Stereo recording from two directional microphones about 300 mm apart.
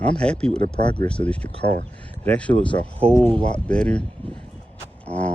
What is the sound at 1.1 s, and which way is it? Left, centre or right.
Speech, centre.